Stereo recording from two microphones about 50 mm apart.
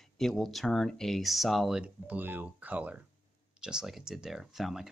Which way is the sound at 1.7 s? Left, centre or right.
Right.